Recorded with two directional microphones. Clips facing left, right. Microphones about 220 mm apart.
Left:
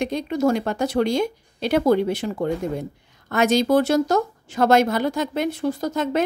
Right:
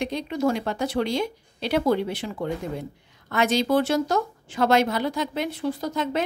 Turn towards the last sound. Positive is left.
turn(degrees=45)  # may be behind; listen again after turning